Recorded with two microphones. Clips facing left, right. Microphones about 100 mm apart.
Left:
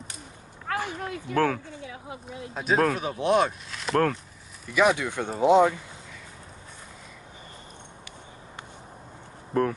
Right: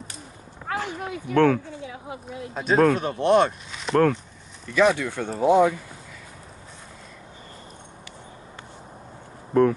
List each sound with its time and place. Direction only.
0.7 s a sound: 15° right (ahead or behind)
1.3 s speech: 5° left (ahead or behind)
4.6 s speech: 15° left (ahead or behind)
9.5 s speech: centre (ahead or behind)